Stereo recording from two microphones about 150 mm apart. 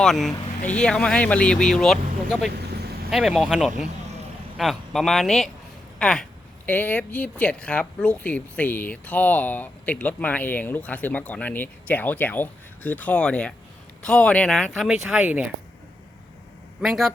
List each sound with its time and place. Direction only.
0.0 s speech: centre (ahead or behind)
16.8 s speech: 5° right (ahead or behind)